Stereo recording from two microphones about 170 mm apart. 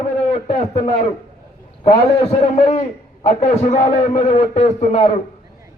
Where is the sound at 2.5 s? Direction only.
40° left (ahead or behind).